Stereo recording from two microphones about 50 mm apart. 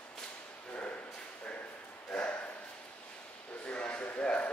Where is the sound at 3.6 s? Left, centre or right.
Left.